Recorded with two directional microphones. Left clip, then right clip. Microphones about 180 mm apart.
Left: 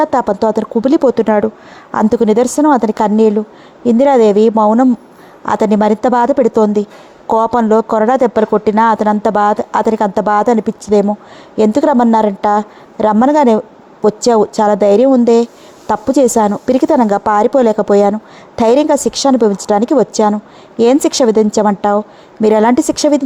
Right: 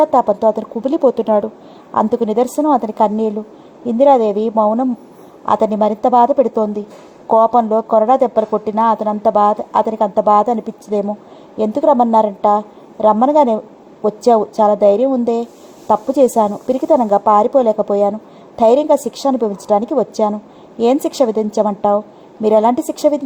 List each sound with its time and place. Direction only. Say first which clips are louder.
0.0 s speech: even; 30° left (ahead or behind)